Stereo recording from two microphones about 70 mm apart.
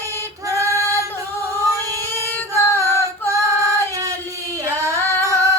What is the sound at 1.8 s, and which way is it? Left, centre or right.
Child singing, right.